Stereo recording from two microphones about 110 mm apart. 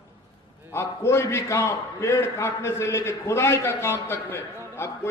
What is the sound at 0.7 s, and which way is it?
A man's voice, 25° left (ahead or behind).